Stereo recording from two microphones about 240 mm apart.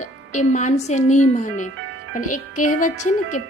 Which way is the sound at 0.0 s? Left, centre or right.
Left.